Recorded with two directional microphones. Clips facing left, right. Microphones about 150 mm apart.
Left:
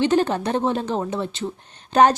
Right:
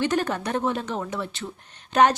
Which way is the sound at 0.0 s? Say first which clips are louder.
Left 5 dB; 25° left (ahead or behind).